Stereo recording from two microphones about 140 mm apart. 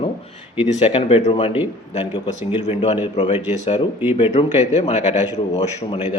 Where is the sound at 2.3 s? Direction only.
55° left (ahead or behind).